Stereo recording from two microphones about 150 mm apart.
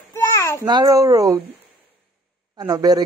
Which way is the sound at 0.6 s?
25° right (ahead or behind).